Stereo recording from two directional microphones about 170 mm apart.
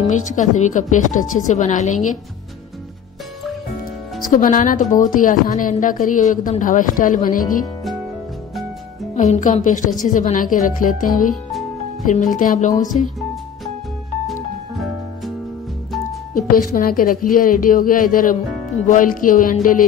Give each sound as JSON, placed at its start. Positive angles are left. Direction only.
{"t": 0.1, "sound": "a woman's voice", "side_deg": 45}
{"t": 4.3, "sound": "a woman's voice", "side_deg": 50}
{"t": 9.1, "sound": "a woman's voice", "side_deg": 45}
{"t": 14.2, "sound": "music", "side_deg": 0}
{"t": 16.5, "sound": "a woman's voice", "side_deg": 55}